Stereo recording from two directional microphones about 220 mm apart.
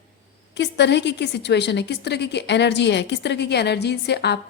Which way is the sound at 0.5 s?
50° left (ahead or behind).